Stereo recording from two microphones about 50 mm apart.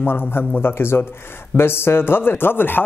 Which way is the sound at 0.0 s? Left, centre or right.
Left.